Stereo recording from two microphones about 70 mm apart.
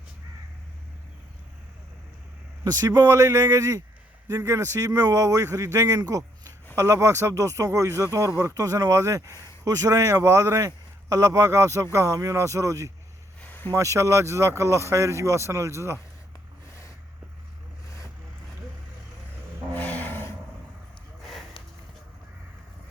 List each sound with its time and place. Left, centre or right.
2.6 s speech: right
3.1 s speech: right
4.9 s speech: right
10.7 s speech: right
13.4 s a sound: left
13.7 s speech: right
19.7 s a sound: left